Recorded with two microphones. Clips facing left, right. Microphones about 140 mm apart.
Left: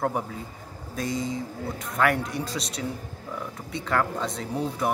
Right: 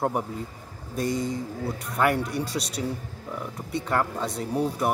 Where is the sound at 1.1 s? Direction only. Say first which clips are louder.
Right 2 dB; 60° right (ahead or behind).